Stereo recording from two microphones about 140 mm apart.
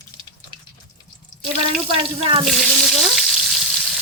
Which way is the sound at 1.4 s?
40° right (ahead or behind).